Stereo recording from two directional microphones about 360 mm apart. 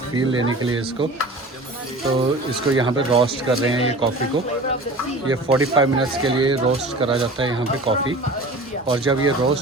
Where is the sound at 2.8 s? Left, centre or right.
Centre.